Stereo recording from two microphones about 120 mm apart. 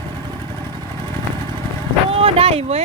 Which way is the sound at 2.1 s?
55° right (ahead or behind).